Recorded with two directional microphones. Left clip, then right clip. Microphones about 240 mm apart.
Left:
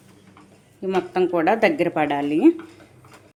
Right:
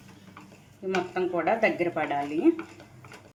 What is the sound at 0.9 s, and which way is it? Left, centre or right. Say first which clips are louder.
Speech: left 7 dB; left.